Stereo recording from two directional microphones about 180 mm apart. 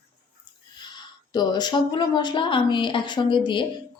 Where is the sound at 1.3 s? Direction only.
25° left (ahead or behind).